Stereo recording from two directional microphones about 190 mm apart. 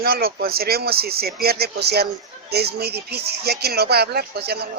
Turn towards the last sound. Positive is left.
turn(degrees=-55)  # may be behind; listen again after turning